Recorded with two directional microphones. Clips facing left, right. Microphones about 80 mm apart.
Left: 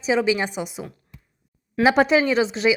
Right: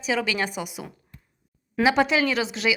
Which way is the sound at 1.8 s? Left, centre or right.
Left.